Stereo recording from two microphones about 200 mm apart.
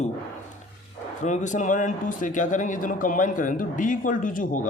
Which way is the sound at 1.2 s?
35° left (ahead or behind).